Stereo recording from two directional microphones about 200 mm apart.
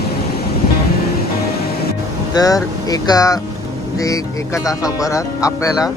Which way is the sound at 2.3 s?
20° left (ahead or behind).